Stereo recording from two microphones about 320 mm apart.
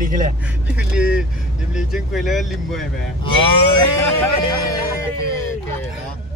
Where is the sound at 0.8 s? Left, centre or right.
Centre.